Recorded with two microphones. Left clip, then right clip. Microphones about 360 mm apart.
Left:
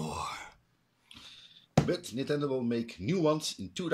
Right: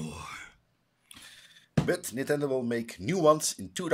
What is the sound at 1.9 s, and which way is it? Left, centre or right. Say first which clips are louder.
Speech: right 3 dB; centre.